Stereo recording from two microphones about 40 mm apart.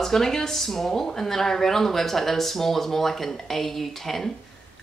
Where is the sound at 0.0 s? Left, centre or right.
Centre.